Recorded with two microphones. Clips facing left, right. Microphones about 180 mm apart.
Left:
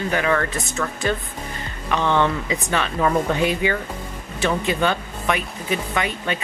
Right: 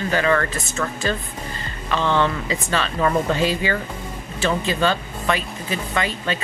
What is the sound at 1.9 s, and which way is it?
Speech, 15° left (ahead or behind).